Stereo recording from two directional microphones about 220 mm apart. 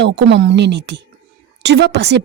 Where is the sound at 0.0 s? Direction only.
55° right (ahead or behind).